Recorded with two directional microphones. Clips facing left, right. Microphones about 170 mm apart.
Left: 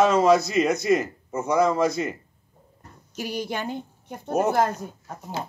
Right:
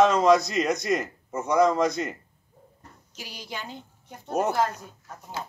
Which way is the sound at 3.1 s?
55° left (ahead or behind).